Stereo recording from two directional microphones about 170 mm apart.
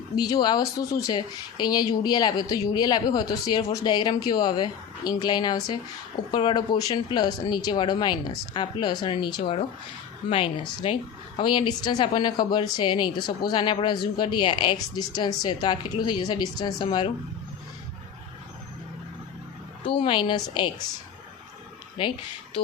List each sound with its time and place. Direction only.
0.2 s a woman's voice: 25° left (ahead or behind)
19.8 s speech: 30° left (ahead or behind)
22.0 s speech: 30° left (ahead or behind)